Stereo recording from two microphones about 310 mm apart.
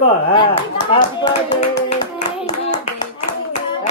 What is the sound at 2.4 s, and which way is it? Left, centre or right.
Hands, centre.